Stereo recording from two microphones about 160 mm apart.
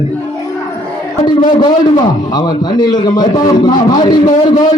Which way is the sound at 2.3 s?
25° left (ahead or behind).